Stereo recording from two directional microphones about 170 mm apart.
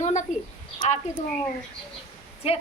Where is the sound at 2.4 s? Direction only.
35° left (ahead or behind).